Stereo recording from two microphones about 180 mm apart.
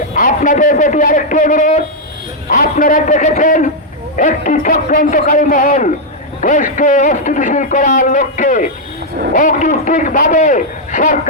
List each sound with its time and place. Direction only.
0.1 s a man's voice: 45° left (ahead or behind)